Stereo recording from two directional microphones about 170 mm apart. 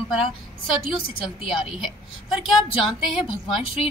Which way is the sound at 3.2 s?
35° left (ahead or behind).